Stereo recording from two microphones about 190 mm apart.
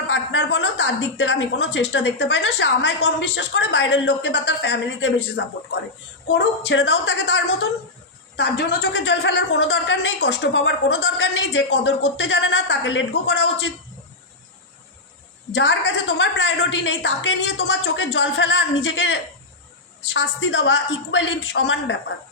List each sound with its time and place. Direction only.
0.1 s speech: 75° left (ahead or behind)
15.5 s speech: 70° left (ahead or behind)